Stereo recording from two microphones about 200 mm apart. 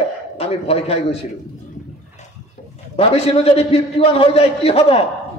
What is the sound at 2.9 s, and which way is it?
A man's voice, 30° left (ahead or behind).